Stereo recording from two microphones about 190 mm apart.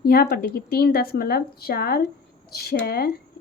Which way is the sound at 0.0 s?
50° left (ahead or behind).